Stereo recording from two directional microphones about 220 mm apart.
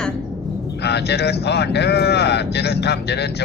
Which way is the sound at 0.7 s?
50° left (ahead or behind).